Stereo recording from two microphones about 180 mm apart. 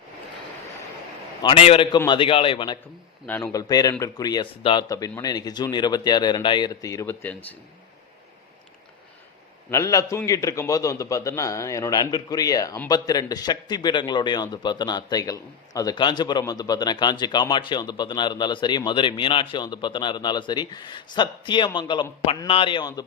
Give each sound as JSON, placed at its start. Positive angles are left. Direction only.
{"t": 1.4, "sound": "a man's voice", "side_deg": 30}
{"t": 3.2, "sound": "a man's voice", "side_deg": 15}
{"t": 9.6, "sound": "a man's voice", "side_deg": 15}